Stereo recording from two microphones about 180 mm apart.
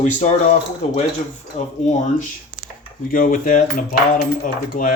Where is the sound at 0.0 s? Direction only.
40° left (ahead or behind).